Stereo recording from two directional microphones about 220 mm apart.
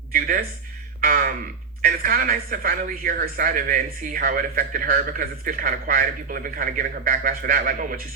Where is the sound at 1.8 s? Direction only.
40° right (ahead or behind).